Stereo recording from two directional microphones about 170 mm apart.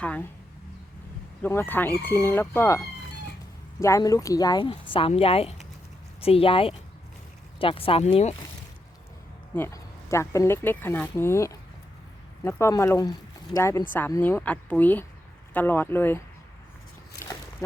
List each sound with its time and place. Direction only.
0.0 s speech: 10° left (ahead or behind)
1.4 s speech: 15° left (ahead or behind); by 8.4 s 40° left (ahead or behind)
9.6 s speech: 15° left (ahead or behind)
17.2 s a sound: 15° left (ahead or behind)